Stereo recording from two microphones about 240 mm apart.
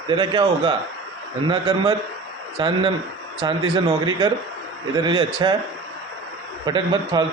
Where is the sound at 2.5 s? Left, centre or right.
Right.